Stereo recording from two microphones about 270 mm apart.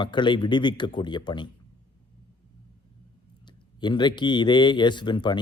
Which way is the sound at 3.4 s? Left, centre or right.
Centre.